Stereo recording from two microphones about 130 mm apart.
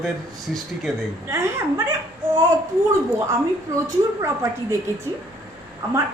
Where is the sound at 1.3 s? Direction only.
20° right (ahead or behind).